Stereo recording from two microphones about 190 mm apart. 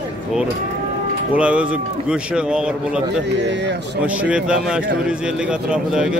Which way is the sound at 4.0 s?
5° right (ahead or behind).